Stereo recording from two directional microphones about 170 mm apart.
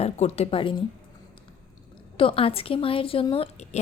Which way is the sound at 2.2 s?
35° left (ahead or behind).